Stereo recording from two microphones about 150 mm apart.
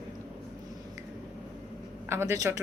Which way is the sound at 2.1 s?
20° right (ahead or behind).